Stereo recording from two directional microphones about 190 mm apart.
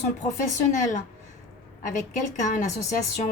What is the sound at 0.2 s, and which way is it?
Speech, 40° left (ahead or behind).